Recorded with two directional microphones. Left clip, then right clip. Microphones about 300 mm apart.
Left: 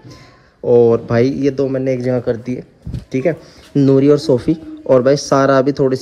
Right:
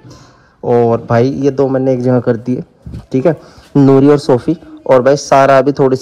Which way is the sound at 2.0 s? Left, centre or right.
Right.